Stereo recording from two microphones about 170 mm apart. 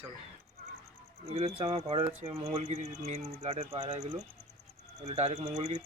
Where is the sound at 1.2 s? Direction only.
40° right (ahead or behind).